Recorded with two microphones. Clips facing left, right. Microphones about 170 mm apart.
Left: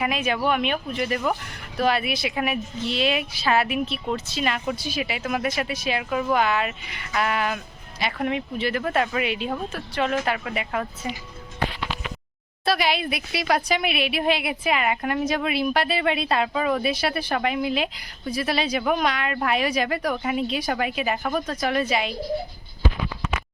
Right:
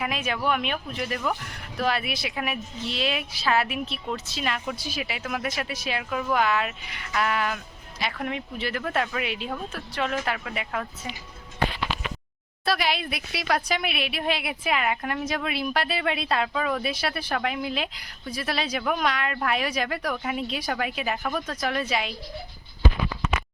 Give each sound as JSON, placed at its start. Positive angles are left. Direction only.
{"t": 0.0, "sound": "speech", "side_deg": 0}
{"t": 12.6, "sound": "speech", "side_deg": 0}